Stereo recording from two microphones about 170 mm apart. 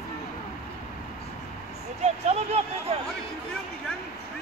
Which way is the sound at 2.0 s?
40° right (ahead or behind).